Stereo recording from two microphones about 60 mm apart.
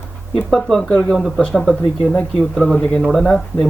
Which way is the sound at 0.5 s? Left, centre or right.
Centre.